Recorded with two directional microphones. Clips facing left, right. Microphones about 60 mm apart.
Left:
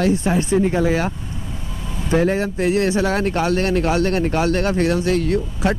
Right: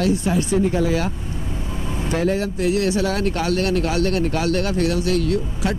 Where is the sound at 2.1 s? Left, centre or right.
Left.